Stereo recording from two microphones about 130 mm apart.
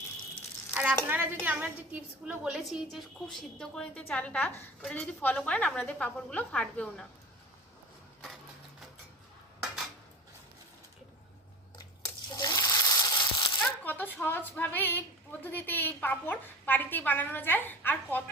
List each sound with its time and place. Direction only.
1.0 s a woman's voice: 15° right (ahead or behind); by 7.0 s 5° left (ahead or behind)
11.8 s frying: 30° left (ahead or behind)
13.8 s a woman's voice: 15° left (ahead or behind)